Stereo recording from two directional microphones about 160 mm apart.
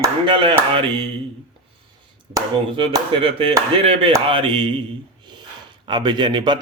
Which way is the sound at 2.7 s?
35° right (ahead or behind).